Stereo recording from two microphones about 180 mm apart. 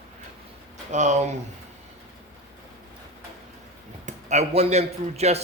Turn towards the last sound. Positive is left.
turn(degrees=-35)  # may be behind; listen again after turning